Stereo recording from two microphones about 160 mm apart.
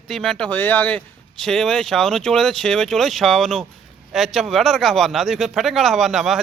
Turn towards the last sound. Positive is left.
turn(degrees=0)  # may be behind; listen again after turning